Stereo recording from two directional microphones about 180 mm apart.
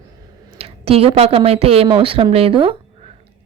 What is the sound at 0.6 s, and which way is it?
Speech, 35° right (ahead or behind).